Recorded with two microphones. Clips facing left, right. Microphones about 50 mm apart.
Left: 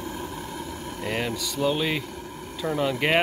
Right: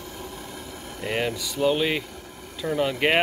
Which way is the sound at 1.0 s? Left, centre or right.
Centre.